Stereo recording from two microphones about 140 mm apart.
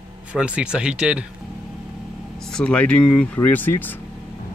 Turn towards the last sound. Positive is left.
turn(degrees=15)  # may be behind; listen again after turning